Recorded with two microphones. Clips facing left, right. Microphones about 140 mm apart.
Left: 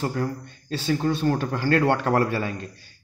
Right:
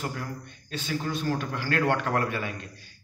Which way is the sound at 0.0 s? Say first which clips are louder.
Left 7 dB; 30° left (ahead or behind).